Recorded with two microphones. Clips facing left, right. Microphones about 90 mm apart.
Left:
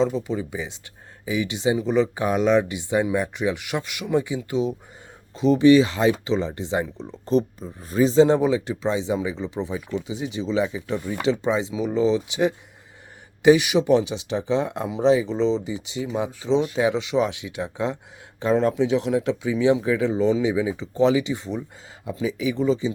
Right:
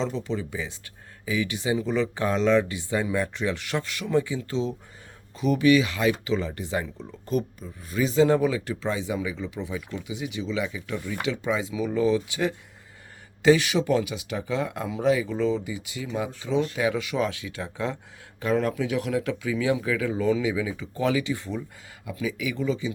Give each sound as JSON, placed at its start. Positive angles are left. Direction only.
{"t": 0.0, "sound": "speech", "side_deg": 15}